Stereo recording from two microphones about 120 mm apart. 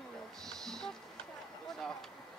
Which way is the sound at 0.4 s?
5° left (ahead or behind).